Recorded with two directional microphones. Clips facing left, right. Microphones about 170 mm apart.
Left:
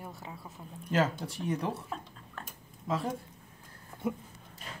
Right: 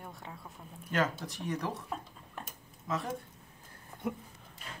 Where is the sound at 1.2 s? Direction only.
30° left (ahead or behind).